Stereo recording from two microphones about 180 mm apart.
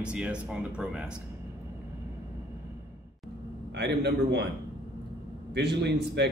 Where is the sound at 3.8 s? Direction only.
65° right (ahead or behind).